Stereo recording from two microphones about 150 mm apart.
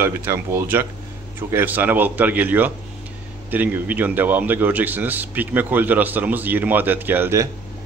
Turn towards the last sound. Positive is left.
turn(degrees=-15)  # may be behind; listen again after turning